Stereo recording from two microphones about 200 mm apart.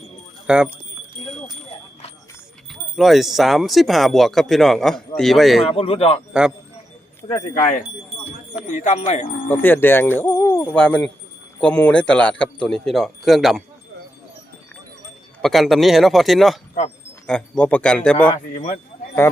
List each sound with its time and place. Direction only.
0.4 s speech: 5° right (ahead or behind)
2.9 s speech: centre (ahead or behind)
5.6 s a man's voice: 30° left (ahead or behind)
6.3 s speech: 5° right (ahead or behind)
7.5 s speech: 40° left (ahead or behind)
9.5 s speech: 10° left (ahead or behind)
15.4 s a man's voice: centre (ahead or behind)